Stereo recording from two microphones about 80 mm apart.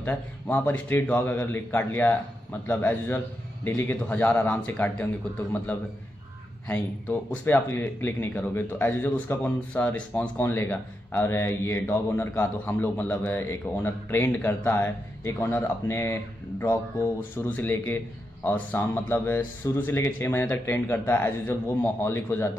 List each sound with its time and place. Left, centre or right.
0.0 s speech: left
7.4 s speech: left
17.5 s speech: left